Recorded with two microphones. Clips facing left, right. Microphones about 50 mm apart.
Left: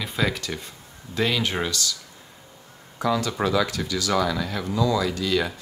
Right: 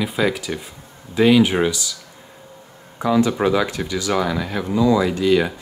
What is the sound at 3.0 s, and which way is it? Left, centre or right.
Speech, right.